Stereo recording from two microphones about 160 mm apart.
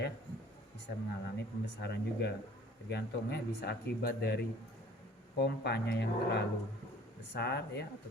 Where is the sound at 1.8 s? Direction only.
90° left.